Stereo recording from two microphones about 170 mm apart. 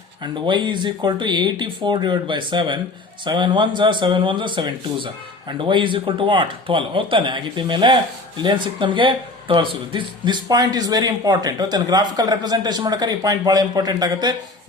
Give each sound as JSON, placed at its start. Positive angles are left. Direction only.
{"t": 0.2, "sound": "speech", "side_deg": -25}